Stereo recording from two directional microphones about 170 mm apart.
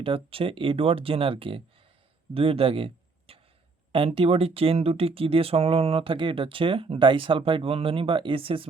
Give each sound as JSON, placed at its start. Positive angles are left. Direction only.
{"t": 0.0, "sound": "speech", "side_deg": -35}
{"t": 2.3, "sound": "a sound", "side_deg": -35}
{"t": 3.9, "sound": "speech", "side_deg": -30}